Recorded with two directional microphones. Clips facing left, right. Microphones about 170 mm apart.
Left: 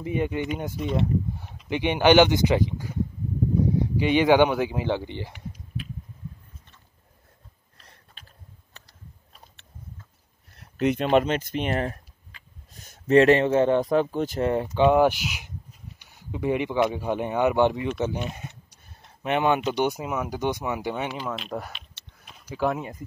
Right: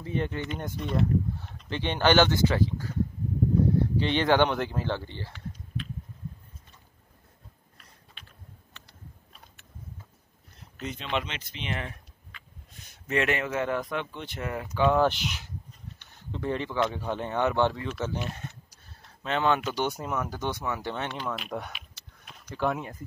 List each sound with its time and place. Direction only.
0.0 s speech: 15° left (ahead or behind)
10.6 s a sound: 65° left (ahead or behind)
11.1 s speech: 45° left (ahead or behind)
14.7 s speech: 20° left (ahead or behind)
19.2 s speech: 15° left (ahead or behind)
21.7 s a sound: centre (ahead or behind)